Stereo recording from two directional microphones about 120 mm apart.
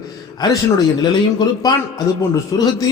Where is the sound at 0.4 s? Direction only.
35° left (ahead or behind).